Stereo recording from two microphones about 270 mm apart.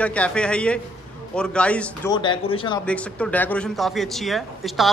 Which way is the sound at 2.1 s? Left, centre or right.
Centre.